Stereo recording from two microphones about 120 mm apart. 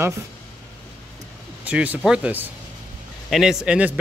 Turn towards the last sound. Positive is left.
turn(degrees=-10)  # may be behind; listen again after turning